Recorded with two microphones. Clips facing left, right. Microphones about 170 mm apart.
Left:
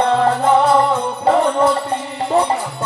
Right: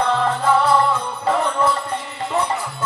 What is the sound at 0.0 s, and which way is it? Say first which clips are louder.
Music: left 4 dB; 35° left (ahead or behind).